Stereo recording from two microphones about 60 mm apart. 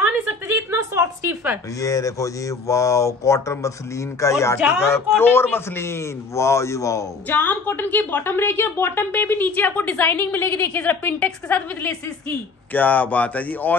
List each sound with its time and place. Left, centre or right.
0.7 s a sound: right
1.8 s speech: left
4.6 s speech: centre
4.8 s speech: left
7.2 s a woman's voice: left